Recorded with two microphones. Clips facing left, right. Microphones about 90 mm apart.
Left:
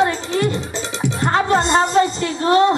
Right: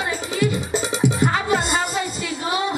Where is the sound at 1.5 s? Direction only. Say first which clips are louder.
Left 5 dB; 5° right (ahead or behind).